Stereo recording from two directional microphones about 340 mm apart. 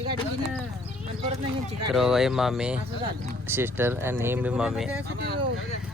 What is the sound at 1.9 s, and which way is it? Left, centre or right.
Speech, centre.